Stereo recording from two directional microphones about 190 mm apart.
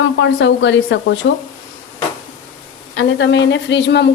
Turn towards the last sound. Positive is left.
turn(degrees=65)  # may be behind; listen again after turning